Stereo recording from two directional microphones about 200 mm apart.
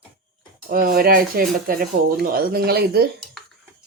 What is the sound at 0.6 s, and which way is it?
Speech, 45° right (ahead or behind).